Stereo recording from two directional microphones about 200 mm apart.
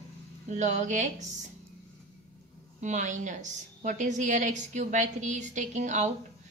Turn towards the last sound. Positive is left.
turn(degrees=-35)  # may be behind; listen again after turning